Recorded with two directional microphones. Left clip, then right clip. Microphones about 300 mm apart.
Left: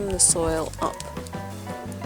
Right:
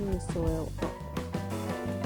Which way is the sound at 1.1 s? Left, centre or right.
Centre.